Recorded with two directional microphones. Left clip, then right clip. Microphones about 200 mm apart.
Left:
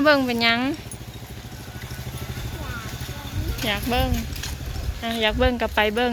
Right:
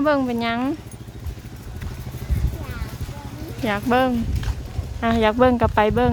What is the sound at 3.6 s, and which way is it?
Speech, 30° right (ahead or behind).